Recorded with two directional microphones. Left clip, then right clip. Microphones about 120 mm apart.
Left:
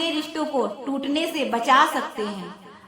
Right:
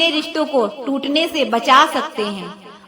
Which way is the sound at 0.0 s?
25° right (ahead or behind).